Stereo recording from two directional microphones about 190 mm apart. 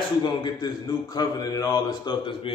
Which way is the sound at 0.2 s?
25° left (ahead or behind).